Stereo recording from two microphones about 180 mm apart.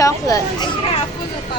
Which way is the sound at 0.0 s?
20° left (ahead or behind).